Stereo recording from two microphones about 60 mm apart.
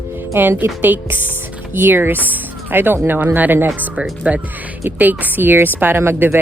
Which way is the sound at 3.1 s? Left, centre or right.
Right.